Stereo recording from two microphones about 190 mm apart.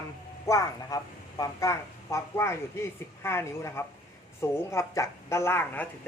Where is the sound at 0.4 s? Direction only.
15° left (ahead or behind).